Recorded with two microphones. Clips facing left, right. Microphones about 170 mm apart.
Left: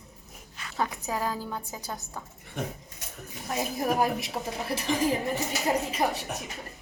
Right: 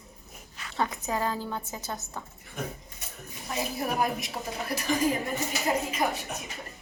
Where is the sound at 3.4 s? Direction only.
40° left (ahead or behind).